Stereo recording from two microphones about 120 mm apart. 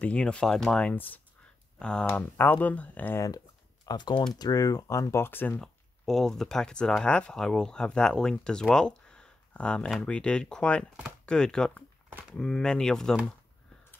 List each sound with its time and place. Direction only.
0.0 s speech: 10° left (ahead or behind)
3.8 s speech: 35° left (ahead or behind); by 5.6 s 20° left (ahead or behind)
5.6 s speech: 5° left (ahead or behind)